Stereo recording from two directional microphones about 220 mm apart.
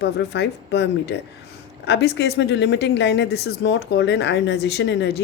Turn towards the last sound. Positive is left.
turn(degrees=50)  # may be behind; listen again after turning